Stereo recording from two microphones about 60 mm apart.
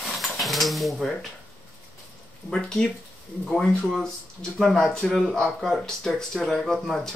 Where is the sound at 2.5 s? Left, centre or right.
Centre.